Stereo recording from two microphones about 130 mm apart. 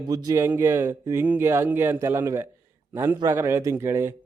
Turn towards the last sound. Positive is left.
turn(degrees=-20)  # may be behind; listen again after turning